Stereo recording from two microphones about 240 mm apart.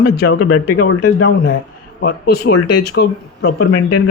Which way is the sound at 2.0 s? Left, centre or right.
Left.